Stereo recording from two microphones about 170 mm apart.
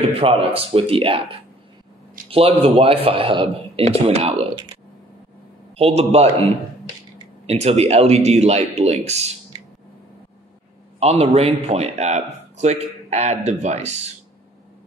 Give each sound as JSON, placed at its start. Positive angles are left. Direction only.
{"t": 0.1, "sound": "speech", "side_deg": -35}
{"t": 2.2, "sound": "a sound", "side_deg": -55}
{"t": 2.6, "sound": "speech", "side_deg": -35}
{"t": 5.8, "sound": "speech", "side_deg": -35}
{"t": 11.0, "sound": "speech", "side_deg": -35}